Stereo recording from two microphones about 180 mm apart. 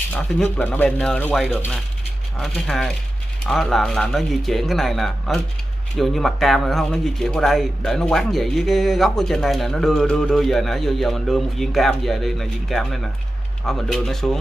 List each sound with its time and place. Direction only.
0.1 s speech: 10° left (ahead or behind)